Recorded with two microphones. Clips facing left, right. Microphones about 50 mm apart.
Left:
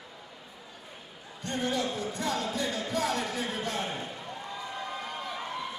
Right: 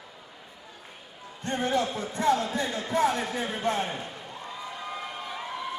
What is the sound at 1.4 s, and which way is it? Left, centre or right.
Speech, right.